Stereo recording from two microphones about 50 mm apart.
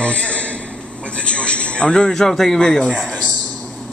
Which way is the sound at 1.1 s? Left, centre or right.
Left.